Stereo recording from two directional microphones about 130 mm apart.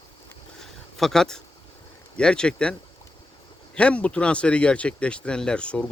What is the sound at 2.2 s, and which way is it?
Speech, 5° left (ahead or behind).